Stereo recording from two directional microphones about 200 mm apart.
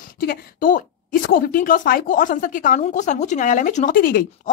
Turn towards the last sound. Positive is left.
turn(degrees=45)  # may be behind; listen again after turning